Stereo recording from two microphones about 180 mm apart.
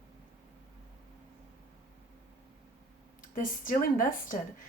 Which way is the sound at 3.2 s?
50° left (ahead or behind).